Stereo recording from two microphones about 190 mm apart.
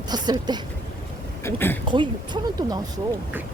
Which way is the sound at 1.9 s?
25° right (ahead or behind).